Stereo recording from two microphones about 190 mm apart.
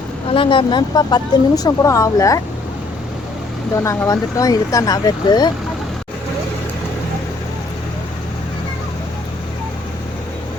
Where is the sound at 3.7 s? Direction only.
15° left (ahead or behind).